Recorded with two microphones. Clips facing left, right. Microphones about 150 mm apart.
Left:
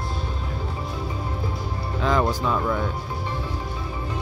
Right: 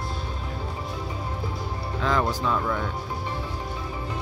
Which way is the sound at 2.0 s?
15° left (ahead or behind).